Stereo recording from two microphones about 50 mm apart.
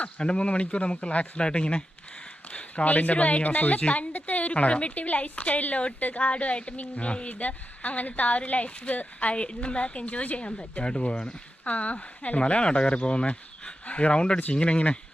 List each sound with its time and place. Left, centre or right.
0.0 s speech: centre